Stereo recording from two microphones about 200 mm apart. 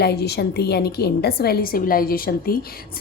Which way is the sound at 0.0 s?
55° left (ahead or behind).